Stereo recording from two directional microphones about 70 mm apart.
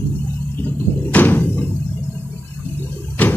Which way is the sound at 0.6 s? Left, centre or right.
Left.